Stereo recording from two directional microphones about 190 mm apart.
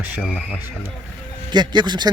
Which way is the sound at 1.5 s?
20° right (ahead or behind).